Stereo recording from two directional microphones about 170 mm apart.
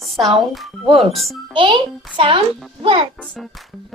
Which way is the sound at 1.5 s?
30° right (ahead or behind).